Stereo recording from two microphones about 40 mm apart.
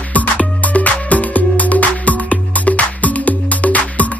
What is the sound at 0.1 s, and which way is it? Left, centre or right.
Music, left.